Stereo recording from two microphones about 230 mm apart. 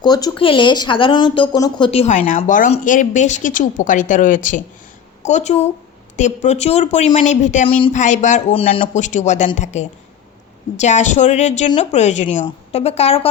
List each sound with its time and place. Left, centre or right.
0.0 s a woman's voice: centre